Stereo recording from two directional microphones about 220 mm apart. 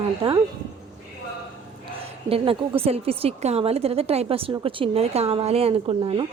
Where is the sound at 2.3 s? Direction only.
25° right (ahead or behind).